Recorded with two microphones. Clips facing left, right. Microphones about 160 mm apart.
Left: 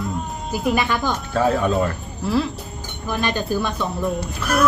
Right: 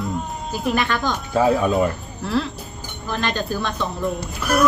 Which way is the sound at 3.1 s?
10° left (ahead or behind).